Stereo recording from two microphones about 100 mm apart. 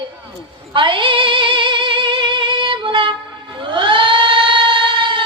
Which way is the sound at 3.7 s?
55° right (ahead or behind).